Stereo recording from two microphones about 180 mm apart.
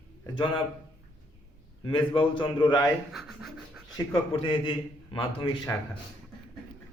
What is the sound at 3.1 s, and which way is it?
Speech, centre (ahead or behind).